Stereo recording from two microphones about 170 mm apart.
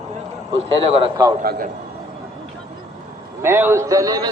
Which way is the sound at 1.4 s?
55° right (ahead or behind).